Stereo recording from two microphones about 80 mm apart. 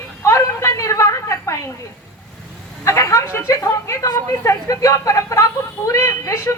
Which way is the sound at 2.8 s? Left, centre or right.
Left.